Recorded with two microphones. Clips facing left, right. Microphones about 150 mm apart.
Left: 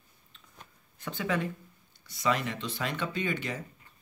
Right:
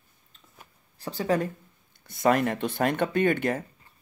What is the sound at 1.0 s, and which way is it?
Speech, 35° right (ahead or behind).